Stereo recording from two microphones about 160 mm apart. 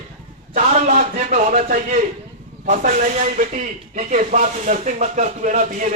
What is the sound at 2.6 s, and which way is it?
Speech, 55° right (ahead or behind).